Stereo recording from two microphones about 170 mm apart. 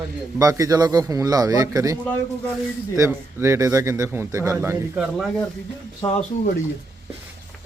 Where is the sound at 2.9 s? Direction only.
15° right (ahead or behind).